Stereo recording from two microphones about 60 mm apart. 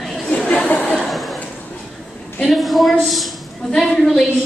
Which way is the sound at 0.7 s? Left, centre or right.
Left.